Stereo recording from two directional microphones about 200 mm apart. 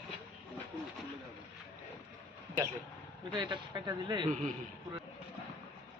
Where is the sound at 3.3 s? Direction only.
25° right (ahead or behind).